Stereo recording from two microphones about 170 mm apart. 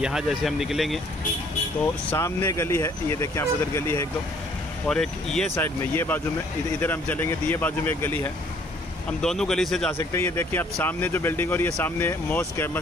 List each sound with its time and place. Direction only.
0.0 s speech: 5° right (ahead or behind)
1.8 s speech: 10° left (ahead or behind)
4.8 s speech: 5° left (ahead or behind)
5.5 s speech: 15° left (ahead or behind)
9.9 s speech: 15° left (ahead or behind)